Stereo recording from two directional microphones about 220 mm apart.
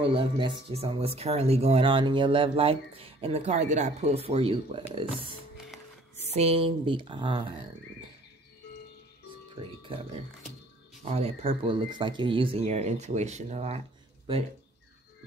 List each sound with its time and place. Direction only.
0.0 s speech: 25° right (ahead or behind)
9.6 s speech: 25° right (ahead or behind)